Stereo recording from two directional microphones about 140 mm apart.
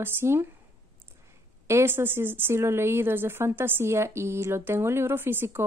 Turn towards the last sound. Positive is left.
turn(degrees=-15)  # may be behind; listen again after turning